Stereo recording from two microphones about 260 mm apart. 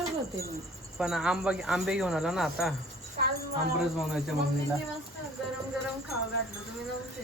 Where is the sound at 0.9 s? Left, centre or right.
Centre.